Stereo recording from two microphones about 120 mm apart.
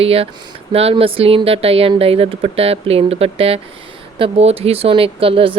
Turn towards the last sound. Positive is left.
turn(degrees=-50)  # may be behind; listen again after turning